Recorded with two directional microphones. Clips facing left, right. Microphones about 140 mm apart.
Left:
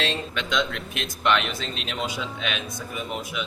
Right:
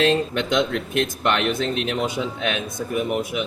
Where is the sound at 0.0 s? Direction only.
50° right (ahead or behind).